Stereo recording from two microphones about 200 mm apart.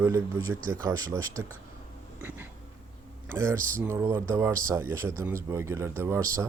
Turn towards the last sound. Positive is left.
turn(degrees=-15)  # may be behind; listen again after turning